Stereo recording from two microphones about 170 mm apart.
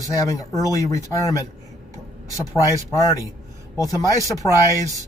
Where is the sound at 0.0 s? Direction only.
20° left (ahead or behind).